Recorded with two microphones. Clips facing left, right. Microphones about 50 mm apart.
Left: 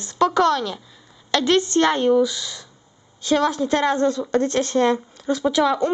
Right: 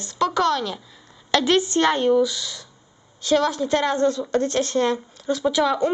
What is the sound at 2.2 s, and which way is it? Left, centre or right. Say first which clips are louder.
Speech: left 1 dB; left.